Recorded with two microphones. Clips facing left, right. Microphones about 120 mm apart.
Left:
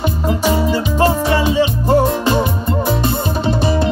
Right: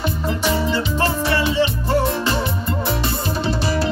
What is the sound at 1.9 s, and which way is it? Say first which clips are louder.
Music: left 9 dB; 45° left (ahead or behind).